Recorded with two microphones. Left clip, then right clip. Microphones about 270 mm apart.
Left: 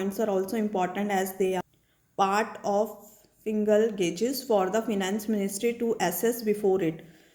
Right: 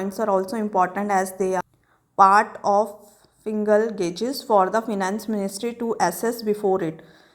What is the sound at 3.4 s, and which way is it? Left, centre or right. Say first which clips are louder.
A woman's voice: right 4 dB; centre.